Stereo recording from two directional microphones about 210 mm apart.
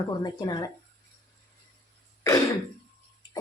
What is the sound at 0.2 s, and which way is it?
Speech, 20° left (ahead or behind).